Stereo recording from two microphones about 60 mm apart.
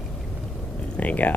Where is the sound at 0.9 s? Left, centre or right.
Left.